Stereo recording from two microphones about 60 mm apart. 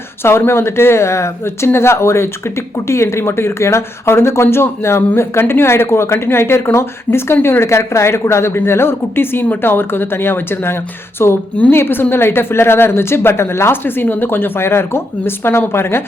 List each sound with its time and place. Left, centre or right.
0.2 s a woman's voice: left